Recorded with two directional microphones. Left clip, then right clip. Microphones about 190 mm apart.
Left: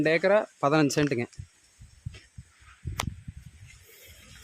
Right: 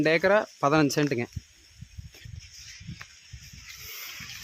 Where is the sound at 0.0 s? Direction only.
Centre (ahead or behind).